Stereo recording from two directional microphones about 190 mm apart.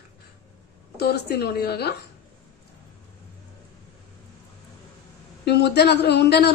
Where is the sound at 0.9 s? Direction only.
55° left (ahead or behind).